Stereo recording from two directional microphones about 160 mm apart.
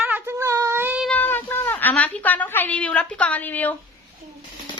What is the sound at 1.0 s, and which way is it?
A woman's voice, 5° left (ahead or behind).